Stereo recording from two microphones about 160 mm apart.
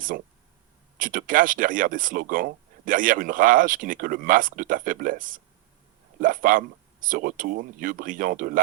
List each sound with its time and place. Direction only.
0.9 s speech: 55° right (ahead or behind)